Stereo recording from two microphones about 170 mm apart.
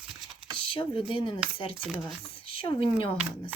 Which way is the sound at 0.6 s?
30° left (ahead or behind).